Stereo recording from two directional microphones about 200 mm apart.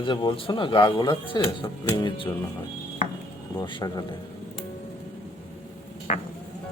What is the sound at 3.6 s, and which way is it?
Speech, 25° left (ahead or behind).